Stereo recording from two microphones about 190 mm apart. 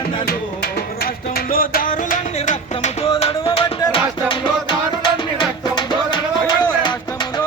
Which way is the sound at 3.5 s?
30° left (ahead or behind).